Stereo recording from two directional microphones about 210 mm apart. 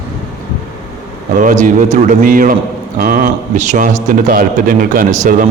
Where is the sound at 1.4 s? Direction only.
35° right (ahead or behind).